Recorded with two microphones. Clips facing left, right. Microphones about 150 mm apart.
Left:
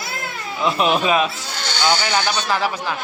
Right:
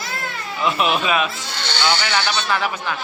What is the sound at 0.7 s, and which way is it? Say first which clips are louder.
Speech: left 2 dB; 35° left (ahead or behind).